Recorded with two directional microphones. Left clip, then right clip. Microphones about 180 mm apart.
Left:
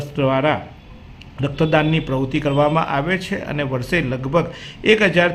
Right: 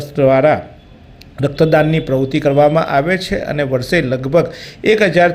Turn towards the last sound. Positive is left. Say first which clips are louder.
# right 4 dB
turn(degrees=-15)  # may be behind; listen again after turning